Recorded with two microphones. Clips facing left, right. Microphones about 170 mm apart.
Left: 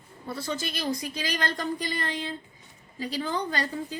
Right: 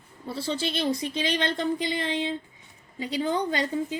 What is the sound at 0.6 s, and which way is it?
Speech, 30° right (ahead or behind).